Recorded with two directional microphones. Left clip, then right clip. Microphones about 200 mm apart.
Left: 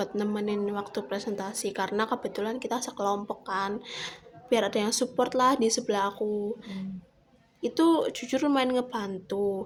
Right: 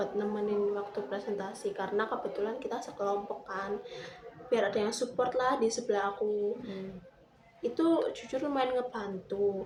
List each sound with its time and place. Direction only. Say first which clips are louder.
0.0 s a woman's voice: left 2 dB; 55° left (ahead or behind)
7.6 s a woman's voice: left 4 dB; 55° left (ahead or behind)